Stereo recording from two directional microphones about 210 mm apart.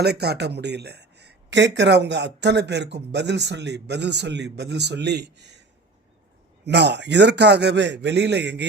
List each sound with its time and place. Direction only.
0.0 s speech: 50° right (ahead or behind)
6.7 s a man's voice: 55° right (ahead or behind)